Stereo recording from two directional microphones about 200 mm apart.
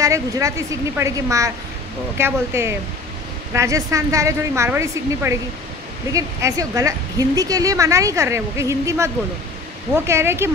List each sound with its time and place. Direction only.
0.0 s a woman's voice: 15° right (ahead or behind)